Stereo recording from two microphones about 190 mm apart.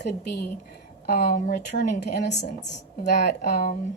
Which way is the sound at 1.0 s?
50° left (ahead or behind).